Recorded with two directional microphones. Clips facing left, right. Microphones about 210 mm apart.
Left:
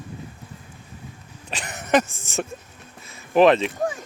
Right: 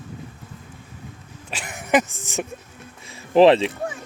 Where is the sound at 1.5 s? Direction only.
10° right (ahead or behind).